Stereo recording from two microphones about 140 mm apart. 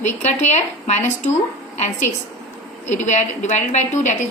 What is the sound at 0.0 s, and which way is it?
A woman's voice, 55° left (ahead or behind).